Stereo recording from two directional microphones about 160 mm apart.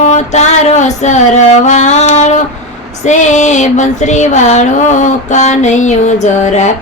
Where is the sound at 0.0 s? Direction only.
45° left (ahead or behind).